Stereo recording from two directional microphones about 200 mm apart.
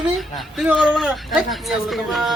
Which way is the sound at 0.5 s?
5° right (ahead or behind).